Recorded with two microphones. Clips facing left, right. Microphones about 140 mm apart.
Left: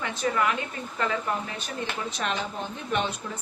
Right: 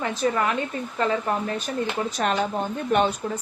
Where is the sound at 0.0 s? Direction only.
35° right (ahead or behind).